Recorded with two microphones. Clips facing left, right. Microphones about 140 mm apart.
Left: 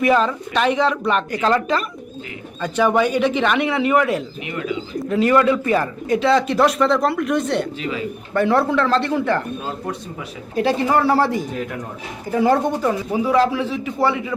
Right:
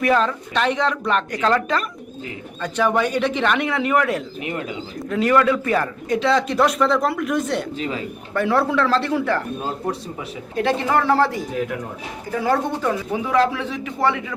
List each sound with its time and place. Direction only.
0.0 s speech: 5° left (ahead or behind)
7.8 s a man's voice: 35° right (ahead or behind)
8.3 s speech: 5° right (ahead or behind)
10.6 s speech: 10° left (ahead or behind)
12.4 s speech: 20° left (ahead or behind)
13.4 s speech: 5° left (ahead or behind)